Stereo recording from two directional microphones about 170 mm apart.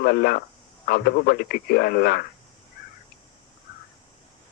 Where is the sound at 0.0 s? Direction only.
65° left (ahead or behind).